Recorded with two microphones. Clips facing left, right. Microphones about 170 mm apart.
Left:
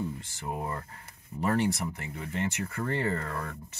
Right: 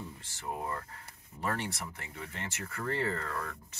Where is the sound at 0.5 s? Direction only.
20° left (ahead or behind).